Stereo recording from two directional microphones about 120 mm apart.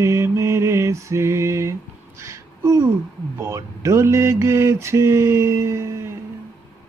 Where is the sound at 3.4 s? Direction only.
25° right (ahead or behind).